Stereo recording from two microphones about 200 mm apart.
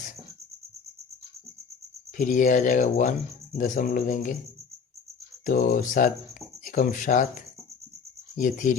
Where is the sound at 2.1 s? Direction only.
40° left (ahead or behind).